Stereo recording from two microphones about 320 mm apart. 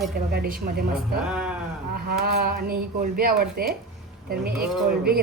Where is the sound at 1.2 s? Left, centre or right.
Centre.